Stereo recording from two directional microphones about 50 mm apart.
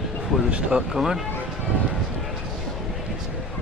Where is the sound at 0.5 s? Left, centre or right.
Right.